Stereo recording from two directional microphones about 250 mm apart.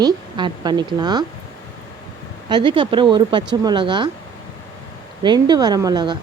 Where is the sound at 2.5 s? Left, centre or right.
Centre.